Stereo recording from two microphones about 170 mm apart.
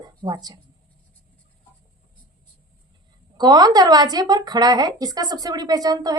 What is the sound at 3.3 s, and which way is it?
A woman's voice, 25° right (ahead or behind).